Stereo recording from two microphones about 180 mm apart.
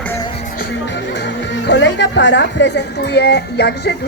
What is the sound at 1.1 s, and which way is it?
Speech, 75° left (ahead or behind).